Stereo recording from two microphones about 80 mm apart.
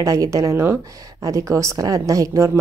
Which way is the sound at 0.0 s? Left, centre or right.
Right.